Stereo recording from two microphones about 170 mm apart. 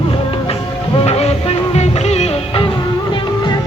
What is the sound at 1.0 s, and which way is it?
Music, 40° left (ahead or behind).